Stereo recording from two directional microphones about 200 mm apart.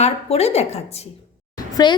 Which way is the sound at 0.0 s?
30° left (ahead or behind).